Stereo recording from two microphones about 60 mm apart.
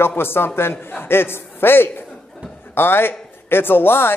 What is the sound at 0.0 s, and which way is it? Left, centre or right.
A man's voice, left.